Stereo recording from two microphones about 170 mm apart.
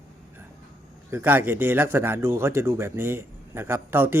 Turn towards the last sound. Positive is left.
turn(degrees=-15)  # may be behind; listen again after turning